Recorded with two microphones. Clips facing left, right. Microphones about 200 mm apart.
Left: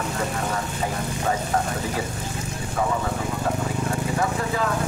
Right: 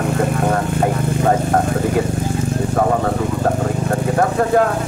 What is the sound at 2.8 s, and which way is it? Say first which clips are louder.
Speech: right 7 dB; 55° right (ahead or behind).